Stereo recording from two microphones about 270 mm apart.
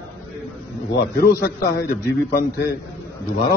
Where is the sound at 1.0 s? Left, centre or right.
Left.